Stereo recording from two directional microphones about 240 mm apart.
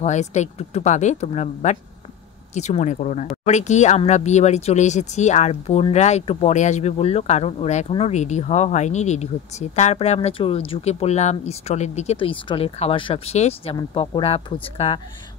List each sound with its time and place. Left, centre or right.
0.0 s speech: left